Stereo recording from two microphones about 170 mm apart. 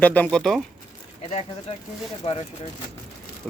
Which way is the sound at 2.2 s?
40° left (ahead or behind).